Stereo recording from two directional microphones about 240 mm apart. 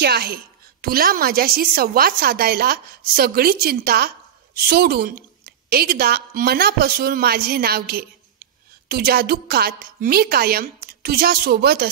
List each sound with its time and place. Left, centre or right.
0.0 s a woman's voice: right